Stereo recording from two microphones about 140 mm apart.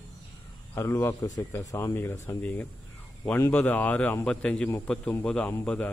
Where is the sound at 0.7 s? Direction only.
20° left (ahead or behind).